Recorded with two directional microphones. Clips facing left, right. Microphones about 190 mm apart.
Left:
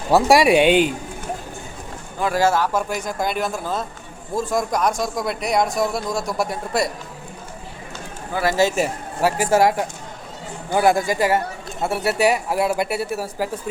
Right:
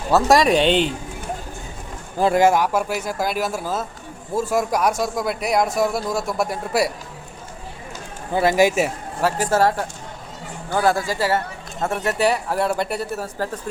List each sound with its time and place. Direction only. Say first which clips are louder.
0.1 s speech: left 1 dB; 10° left (ahead or behind)
2.3 s a man's voice: right 1 dB; 15° right (ahead or behind)
8.3 s a man's voice: right 3 dB; 20° right (ahead or behind)
9.2 s speech: left 2 dB; 10° left (ahead or behind)